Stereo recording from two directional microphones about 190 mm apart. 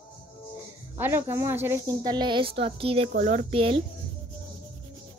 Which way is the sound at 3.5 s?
30° right (ahead or behind).